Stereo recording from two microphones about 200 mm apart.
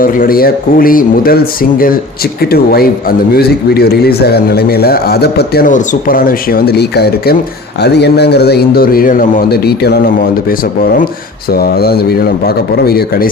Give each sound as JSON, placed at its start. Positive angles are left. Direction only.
{"t": 0.0, "sound": "a man's voice", "side_deg": 45}
{"t": 2.5, "sound": "a man's voice", "side_deg": 50}
{"t": 11.5, "sound": "a man's voice", "side_deg": 50}